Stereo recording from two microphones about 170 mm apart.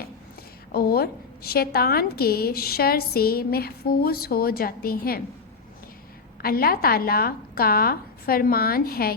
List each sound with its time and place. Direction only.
0.7 s a woman's voice: 65° left (ahead or behind)
6.4 s a woman's voice: 60° left (ahead or behind)